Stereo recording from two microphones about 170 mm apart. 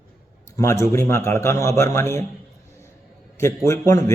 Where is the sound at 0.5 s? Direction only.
15° left (ahead or behind).